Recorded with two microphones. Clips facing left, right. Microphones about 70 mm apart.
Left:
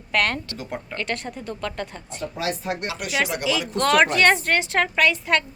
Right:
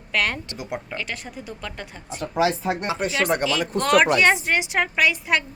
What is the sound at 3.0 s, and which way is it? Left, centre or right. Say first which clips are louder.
Speech: right 4 dB; right.